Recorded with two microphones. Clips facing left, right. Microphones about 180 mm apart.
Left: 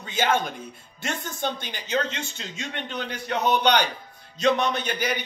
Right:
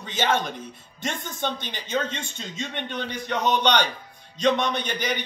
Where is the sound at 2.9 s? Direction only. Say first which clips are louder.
Even; 10° left (ahead or behind).